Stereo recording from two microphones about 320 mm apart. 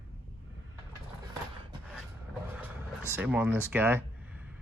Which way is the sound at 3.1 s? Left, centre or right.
Centre.